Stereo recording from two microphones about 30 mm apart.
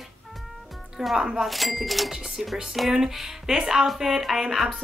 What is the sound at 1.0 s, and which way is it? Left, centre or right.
Speech, centre.